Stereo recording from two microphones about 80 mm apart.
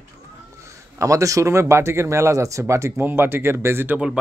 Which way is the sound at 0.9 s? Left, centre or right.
Right.